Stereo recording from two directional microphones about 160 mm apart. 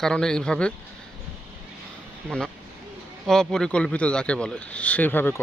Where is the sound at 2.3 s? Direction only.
5° left (ahead or behind).